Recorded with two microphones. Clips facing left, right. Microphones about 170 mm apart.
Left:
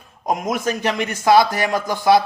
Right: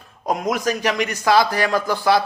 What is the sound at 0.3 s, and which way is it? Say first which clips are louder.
A man's voice: even; 20° left (ahead or behind).